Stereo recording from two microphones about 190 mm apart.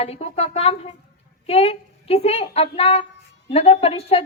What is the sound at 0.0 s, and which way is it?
A woman's voice, 35° left (ahead or behind).